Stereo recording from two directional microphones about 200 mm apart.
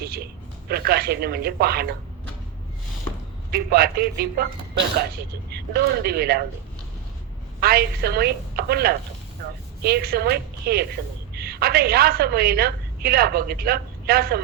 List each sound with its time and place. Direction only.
0.0 s a woman's voice: 50° right (ahead or behind)
3.5 s a woman's voice: 50° right (ahead or behind)
5.5 s a woman's voice: 55° right (ahead or behind)
7.6 s a woman's voice: 50° right (ahead or behind)